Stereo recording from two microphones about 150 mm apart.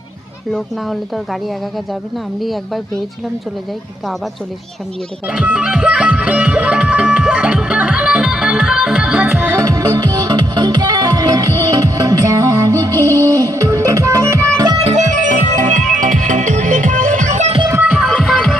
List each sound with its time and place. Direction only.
0.5 s speech: centre (ahead or behind)
5.3 s music: 5° right (ahead or behind); by 14.8 s 20° right (ahead or behind)
14.8 s music: 55° right (ahead or behind)
17.7 s music: 5° right (ahead or behind)